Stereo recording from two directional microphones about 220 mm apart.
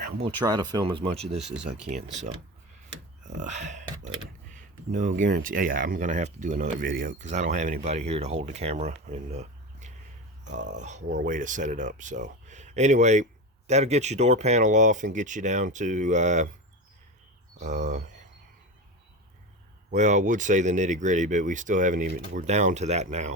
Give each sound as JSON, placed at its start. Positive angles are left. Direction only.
{"t": 0.3, "sound": "speech", "side_deg": -20}
{"t": 3.4, "sound": "speech", "side_deg": -35}
{"t": 17.6, "sound": "speech", "side_deg": -30}
{"t": 19.9, "sound": "speech", "side_deg": -35}